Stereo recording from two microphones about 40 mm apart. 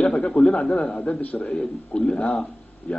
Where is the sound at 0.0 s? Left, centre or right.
Left.